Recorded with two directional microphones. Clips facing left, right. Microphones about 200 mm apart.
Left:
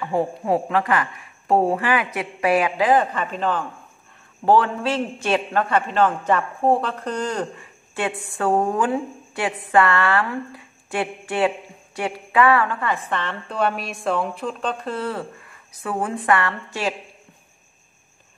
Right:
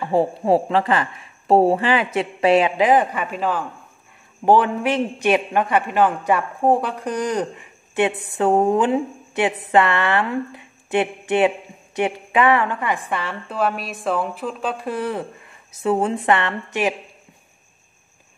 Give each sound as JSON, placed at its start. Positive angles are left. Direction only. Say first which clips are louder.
{"t": 0.0, "sound": "a woman's voice", "louder": "right 4 dB", "side_deg": -30}